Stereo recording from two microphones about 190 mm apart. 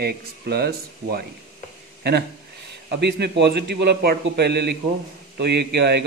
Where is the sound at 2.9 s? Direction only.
60° right (ahead or behind).